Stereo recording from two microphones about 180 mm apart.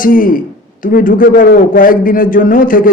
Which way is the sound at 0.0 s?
50° left (ahead or behind).